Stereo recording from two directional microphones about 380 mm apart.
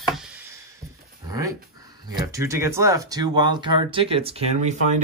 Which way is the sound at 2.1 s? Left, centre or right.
Centre.